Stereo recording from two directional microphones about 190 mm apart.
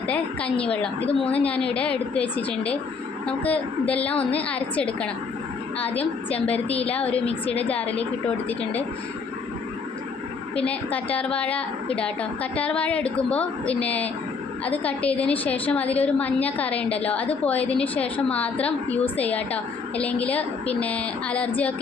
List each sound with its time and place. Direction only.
0.6 s a woman's voice: 5° left (ahead or behind)
1.0 s a woman's voice: 30° left (ahead or behind)
1.7 s a woman's voice: 5° left (ahead or behind)
6.5 s a woman's voice: 30° left (ahead or behind)
6.8 s a woman's voice: 5° left (ahead or behind)
10.7 s a woman's voice: 5° left (ahead or behind)